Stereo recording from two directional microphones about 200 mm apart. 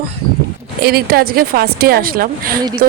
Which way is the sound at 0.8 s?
50° right (ahead or behind).